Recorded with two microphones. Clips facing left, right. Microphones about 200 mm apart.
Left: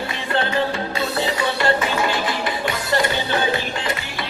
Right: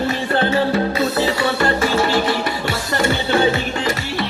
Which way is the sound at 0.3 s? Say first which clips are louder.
Right 3 dB; 30° right (ahead or behind).